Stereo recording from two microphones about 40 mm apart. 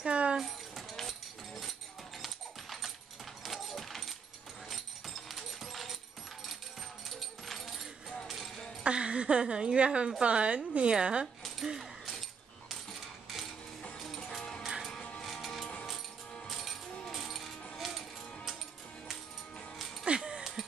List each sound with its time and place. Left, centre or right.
0.0 s a sound: right
0.4 s music: centre
2.2 s dog: centre
3.4 s keys jangling: centre
4.6 s dog: centre
7.4 s a sound: centre
8.8 s a woman's voice: right
12.1 s a sound: centre
13.9 s music: centre
15.0 s music: left
15.2 s music: centre
20.1 s music: right